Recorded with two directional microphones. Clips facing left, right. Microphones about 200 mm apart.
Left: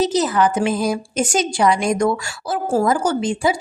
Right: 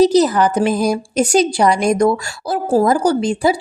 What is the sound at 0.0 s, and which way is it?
Speech, 35° right (ahead or behind).